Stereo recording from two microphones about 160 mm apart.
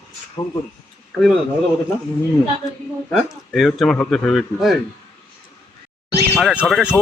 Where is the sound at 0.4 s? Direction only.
25° left (ahead or behind).